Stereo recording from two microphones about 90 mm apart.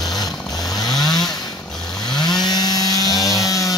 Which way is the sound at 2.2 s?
50° left (ahead or behind).